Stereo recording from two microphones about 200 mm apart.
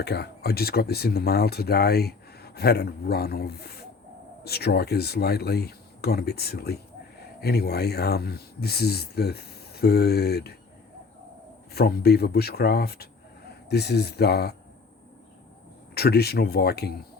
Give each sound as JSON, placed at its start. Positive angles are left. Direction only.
{"t": 0.0, "sound": "speech", "side_deg": 55}
{"t": 11.7, "sound": "speech", "side_deg": 50}
{"t": 16.0, "sound": "speech", "side_deg": 55}